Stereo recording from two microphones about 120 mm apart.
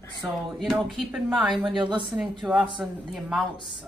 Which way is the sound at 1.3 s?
10° right (ahead or behind).